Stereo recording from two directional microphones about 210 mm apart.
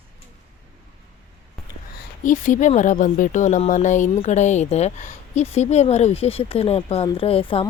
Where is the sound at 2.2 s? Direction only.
40° left (ahead or behind).